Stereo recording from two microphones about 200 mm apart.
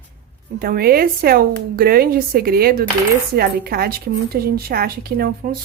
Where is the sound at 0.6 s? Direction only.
50° right (ahead or behind).